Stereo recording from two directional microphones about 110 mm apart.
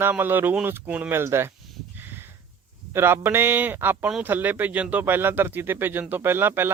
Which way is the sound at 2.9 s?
20° right (ahead or behind).